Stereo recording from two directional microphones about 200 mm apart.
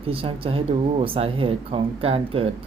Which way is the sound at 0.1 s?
30° right (ahead or behind).